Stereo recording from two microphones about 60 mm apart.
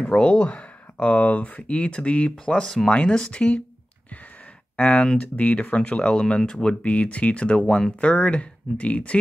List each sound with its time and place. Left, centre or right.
0.2 s speech: left
4.7 s speech: left